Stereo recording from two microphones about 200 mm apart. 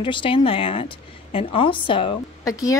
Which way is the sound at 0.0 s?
25° left (ahead or behind).